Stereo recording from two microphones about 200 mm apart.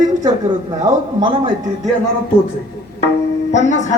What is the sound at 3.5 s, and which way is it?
Speech, 35° left (ahead or behind).